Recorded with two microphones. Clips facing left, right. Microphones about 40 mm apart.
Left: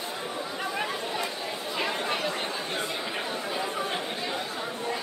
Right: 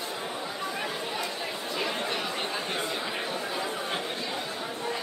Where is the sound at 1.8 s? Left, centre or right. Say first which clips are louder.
Left 2 dB; centre.